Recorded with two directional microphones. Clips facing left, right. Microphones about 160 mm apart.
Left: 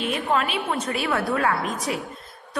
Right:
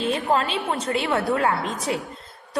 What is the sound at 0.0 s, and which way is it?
A woman's voice, 30° right (ahead or behind).